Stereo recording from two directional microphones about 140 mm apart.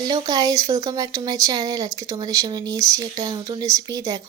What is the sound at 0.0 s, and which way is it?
Speech, 30° right (ahead or behind).